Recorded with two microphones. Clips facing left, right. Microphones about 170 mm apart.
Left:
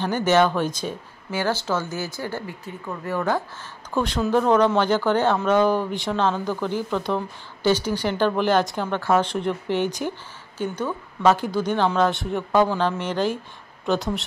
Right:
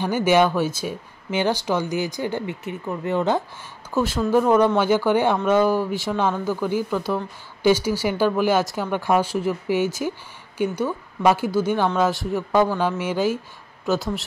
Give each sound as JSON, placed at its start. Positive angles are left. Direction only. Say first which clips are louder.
{"t": 0.0, "sound": "speech", "louder": "right 1 dB", "side_deg": -10}
{"t": 3.9, "sound": "speech", "louder": "right 2 dB", "side_deg": -5}